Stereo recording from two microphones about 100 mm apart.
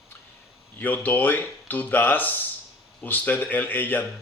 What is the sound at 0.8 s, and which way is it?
Speech, 20° left (ahead or behind).